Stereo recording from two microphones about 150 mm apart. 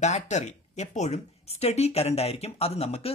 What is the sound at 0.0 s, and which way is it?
Speech, 50° left (ahead or behind).